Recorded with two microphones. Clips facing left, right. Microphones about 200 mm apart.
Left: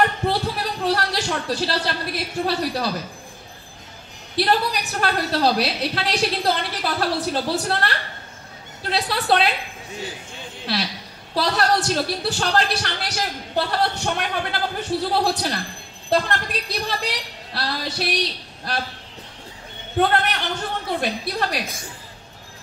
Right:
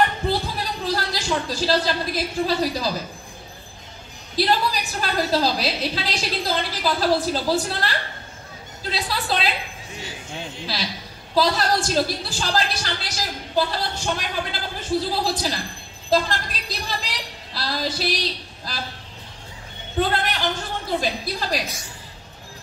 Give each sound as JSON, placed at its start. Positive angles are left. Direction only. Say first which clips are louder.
{"t": 0.3, "sound": "a sound", "louder": "left 1 dB", "side_deg": 65}
{"t": 4.4, "sound": "a woman's voice", "louder": "left 1 dB", "side_deg": 65}
{"t": 8.9, "sound": "a woman's voice", "louder": "left 5 dB", "side_deg": 65}
{"t": 10.7, "sound": "a woman's voice", "louder": "left 7 dB", "side_deg": 65}
{"t": 20.0, "sound": "a woman's voice", "louder": "left 2 dB", "side_deg": 65}